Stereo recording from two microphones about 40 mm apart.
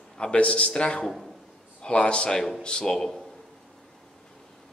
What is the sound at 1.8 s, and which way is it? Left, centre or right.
A man's voice, left.